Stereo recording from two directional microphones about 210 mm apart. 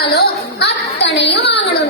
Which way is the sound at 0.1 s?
50° left (ahead or behind).